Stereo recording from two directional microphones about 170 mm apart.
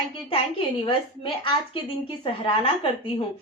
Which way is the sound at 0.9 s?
30° left (ahead or behind).